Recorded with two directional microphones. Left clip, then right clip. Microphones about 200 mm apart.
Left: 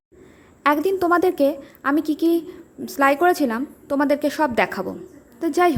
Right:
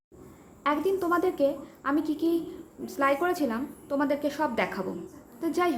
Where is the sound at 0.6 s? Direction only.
40° left (ahead or behind).